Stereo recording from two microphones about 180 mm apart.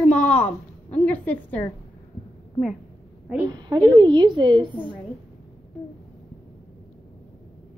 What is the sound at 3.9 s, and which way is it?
Speech, 25° right (ahead or behind).